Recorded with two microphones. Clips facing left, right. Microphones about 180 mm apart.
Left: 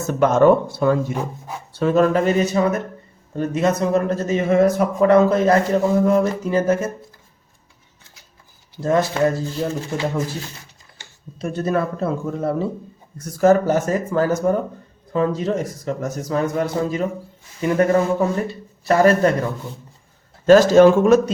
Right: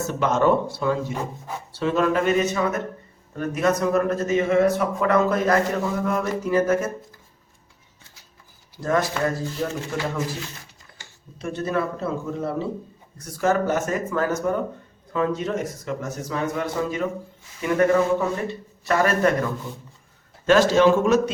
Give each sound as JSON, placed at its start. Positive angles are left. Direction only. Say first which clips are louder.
{"t": 0.1, "sound": "a man's voice", "louder": "left 7 dB", "side_deg": 50}
{"t": 8.7, "sound": "a man's voice", "louder": "left 4 dB", "side_deg": 25}
{"t": 11.3, "sound": "a man's voice", "louder": "left 4 dB", "side_deg": 40}
{"t": 13.1, "sound": "a man's voice", "louder": "left 7 dB", "side_deg": 40}
{"t": 20.5, "sound": "speech", "louder": "left 6 dB", "side_deg": 45}